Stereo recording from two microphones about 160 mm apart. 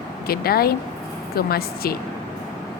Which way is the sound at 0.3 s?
70° left (ahead or behind).